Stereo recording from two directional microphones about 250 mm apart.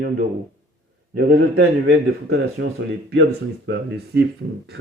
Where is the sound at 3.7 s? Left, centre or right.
Right.